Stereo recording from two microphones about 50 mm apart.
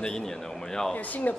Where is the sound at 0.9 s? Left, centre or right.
Left.